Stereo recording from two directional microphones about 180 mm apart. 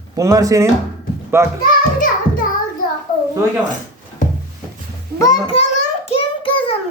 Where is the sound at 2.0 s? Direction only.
50° left (ahead or behind).